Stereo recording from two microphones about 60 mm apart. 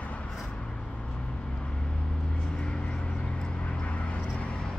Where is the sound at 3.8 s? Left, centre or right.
Left.